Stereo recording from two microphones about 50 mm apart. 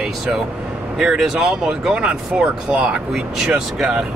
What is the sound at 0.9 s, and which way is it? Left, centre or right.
Speech, centre.